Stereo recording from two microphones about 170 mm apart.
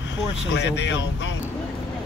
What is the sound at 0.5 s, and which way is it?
Speech, 90° left.